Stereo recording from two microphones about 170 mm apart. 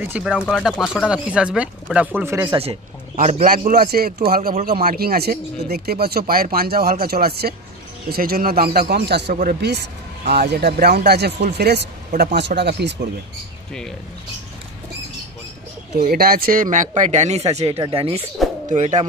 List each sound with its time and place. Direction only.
0.0 s speech: 10° right (ahead or behind)
2.5 s a man's voice: 35° right (ahead or behind)
3.4 s a man's voice: 55° right (ahead or behind); by 9.3 s 80° right
9.3 s a man's voice: 55° right (ahead or behind)
9.6 s speech: 80° right
12.1 s speech: 50° right (ahead or behind)
12.4 s speech: 80° right
16.0 s speech: 60° right (ahead or behind); by 18.2 s 35° right (ahead or behind)
18.7 s speech: 50° right (ahead or behind)